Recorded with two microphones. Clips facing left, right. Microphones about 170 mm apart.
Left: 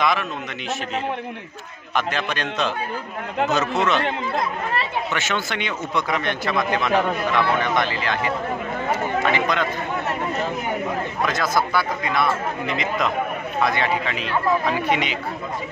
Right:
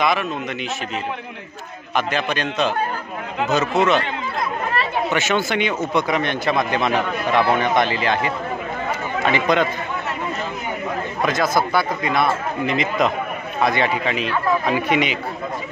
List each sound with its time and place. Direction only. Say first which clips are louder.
0.0 s speech: right 2 dB; 5° right (ahead or behind)
2.0 s a man's voice: right 3 dB; 5° right (ahead or behind)
5.1 s speech: right 5 dB; 10° right (ahead or behind)
11.2 s speech: right 4 dB; 15° right (ahead or behind)